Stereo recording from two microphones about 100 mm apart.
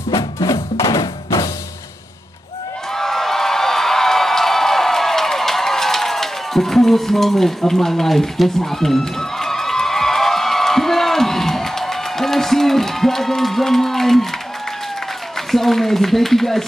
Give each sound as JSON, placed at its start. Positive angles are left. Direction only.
{"t": 0.1, "sound": "music", "side_deg": 40}
{"t": 2.9, "sound": "a sound", "side_deg": 5}
{"t": 15.5, "sound": "a man's voice", "side_deg": 5}